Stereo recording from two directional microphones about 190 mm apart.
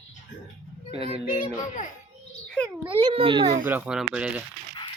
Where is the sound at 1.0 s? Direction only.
30° right (ahead or behind).